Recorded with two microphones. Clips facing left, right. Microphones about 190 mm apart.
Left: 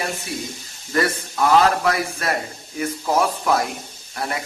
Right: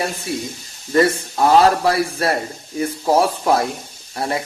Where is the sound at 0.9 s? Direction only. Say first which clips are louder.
Right 5 dB; 30° right (ahead or behind).